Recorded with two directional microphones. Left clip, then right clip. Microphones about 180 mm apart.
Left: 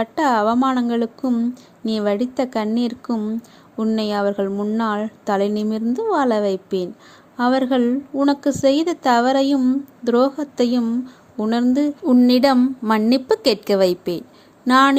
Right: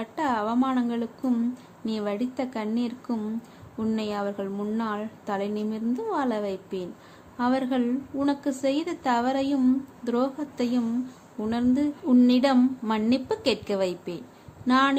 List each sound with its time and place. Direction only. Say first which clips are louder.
0.0 s a woman's voice: left 10 dB; 40° left (ahead or behind)